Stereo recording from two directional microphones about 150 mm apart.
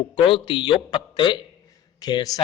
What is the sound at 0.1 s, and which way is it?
A man's voice, 35° left (ahead or behind).